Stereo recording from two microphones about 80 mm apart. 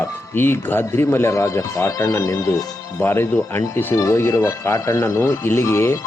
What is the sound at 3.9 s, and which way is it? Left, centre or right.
Speech, left.